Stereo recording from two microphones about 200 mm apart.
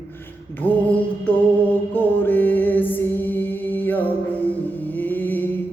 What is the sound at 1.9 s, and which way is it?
Music, 10° left (ahead or behind).